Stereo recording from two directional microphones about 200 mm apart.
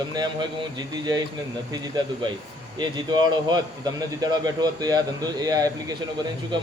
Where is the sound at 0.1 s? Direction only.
20° right (ahead or behind).